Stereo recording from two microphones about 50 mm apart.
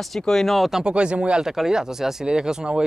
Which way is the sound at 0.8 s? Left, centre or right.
Centre.